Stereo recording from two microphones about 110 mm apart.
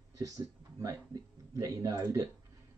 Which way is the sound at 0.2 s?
30° right (ahead or behind).